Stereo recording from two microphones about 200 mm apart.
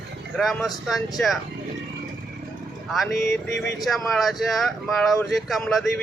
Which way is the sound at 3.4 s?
60° left (ahead or behind).